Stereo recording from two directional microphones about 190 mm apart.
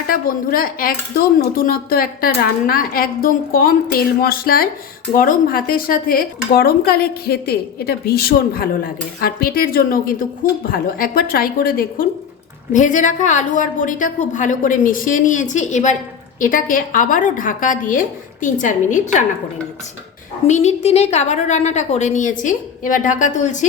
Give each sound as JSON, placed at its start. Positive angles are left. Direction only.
{"t": 0.1, "sound": "a woman's voice", "side_deg": 50}
{"t": 20.5, "sound": "a woman's voice", "side_deg": 35}